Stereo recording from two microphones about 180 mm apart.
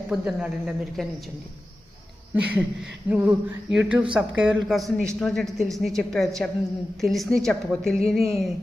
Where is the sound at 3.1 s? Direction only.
5° right (ahead or behind).